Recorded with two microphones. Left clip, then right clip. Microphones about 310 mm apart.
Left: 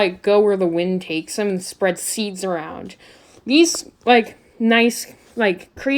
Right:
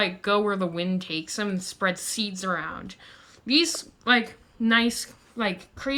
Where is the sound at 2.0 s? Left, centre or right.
Centre.